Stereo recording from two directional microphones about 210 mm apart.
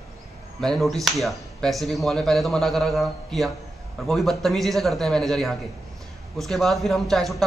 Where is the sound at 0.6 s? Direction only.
Centre (ahead or behind).